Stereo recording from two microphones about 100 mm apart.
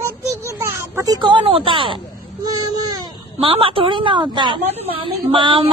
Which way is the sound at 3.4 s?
65° right (ahead or behind).